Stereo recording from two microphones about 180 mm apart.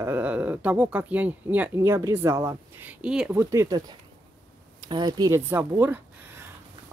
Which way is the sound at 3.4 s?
15° right (ahead or behind).